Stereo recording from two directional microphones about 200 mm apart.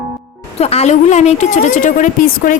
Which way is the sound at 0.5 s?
30° left (ahead or behind).